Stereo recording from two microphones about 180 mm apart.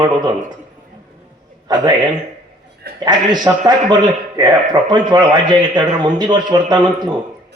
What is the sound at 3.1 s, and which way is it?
A man's voice, 25° right (ahead or behind).